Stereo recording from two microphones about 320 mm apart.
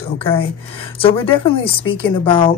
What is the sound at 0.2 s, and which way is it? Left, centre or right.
Speech, centre.